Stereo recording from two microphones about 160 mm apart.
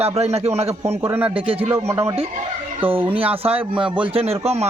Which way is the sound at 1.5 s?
35° right (ahead or behind).